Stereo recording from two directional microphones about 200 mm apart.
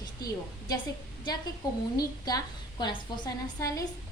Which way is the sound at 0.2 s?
20° left (ahead or behind).